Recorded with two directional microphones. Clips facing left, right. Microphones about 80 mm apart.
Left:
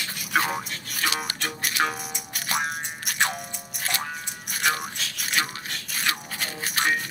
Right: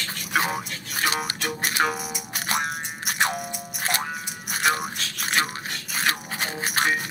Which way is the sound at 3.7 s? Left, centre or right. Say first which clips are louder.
Right 3 dB; right.